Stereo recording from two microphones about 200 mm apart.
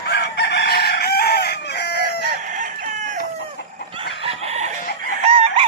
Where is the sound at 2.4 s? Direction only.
40° right (ahead or behind).